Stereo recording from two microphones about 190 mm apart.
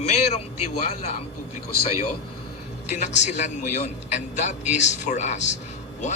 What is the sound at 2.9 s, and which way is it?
A man's voice, 40° left (ahead or behind).